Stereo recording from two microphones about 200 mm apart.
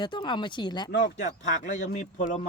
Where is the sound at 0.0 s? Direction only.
20° left (ahead or behind).